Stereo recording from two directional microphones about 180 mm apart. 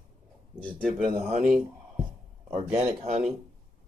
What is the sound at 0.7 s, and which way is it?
Speech, centre (ahead or behind).